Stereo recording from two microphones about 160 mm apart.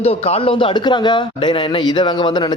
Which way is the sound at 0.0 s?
40° left (ahead or behind).